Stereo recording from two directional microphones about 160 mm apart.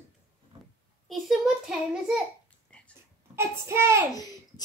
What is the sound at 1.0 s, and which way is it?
Child singing, centre (ahead or behind).